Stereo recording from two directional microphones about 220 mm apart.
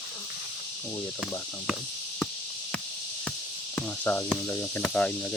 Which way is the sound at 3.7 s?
10° left (ahead or behind).